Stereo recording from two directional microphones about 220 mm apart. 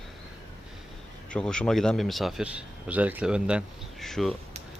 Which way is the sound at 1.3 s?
5° left (ahead or behind).